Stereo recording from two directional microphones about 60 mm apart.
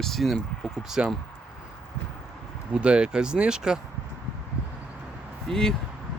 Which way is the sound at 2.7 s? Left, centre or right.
Centre.